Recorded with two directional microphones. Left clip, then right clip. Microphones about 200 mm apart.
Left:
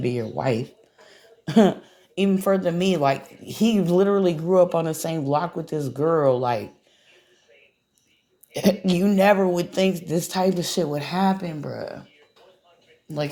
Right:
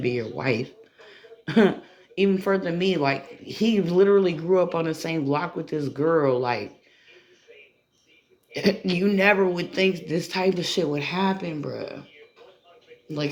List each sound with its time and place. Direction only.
0.0 s a sound: 40° left (ahead or behind)
2.1 s speech: 45° left (ahead or behind)
8.5 s speech: 45° left (ahead or behind)
13.1 s a man's voice: 40° left (ahead or behind)